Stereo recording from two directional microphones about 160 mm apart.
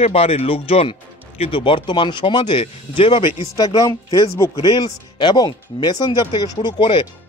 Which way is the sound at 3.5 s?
20° left (ahead or behind).